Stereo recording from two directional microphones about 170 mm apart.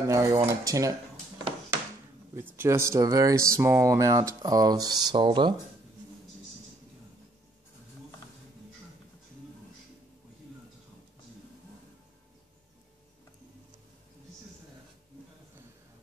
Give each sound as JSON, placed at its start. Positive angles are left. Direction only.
{"t": 0.0, "sound": "speech", "side_deg": -20}
{"t": 2.3, "sound": "speech", "side_deg": -15}